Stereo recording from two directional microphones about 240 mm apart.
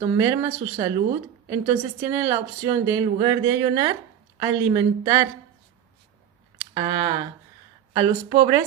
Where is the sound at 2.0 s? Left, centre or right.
Centre.